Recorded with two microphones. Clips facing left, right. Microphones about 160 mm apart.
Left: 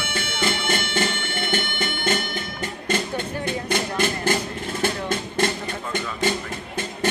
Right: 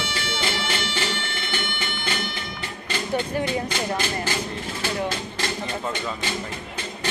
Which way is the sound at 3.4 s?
55° left (ahead or behind).